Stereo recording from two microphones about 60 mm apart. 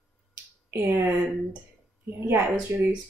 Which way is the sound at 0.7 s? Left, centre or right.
Right.